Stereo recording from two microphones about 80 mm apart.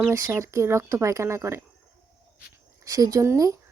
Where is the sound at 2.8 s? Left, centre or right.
Right.